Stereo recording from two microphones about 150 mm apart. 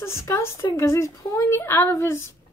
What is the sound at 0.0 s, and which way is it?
A woman's voice, 20° left (ahead or behind).